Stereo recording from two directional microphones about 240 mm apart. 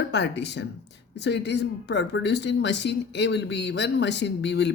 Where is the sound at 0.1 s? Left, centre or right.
Left.